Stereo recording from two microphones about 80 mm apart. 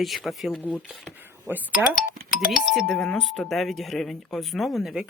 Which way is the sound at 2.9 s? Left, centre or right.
Centre.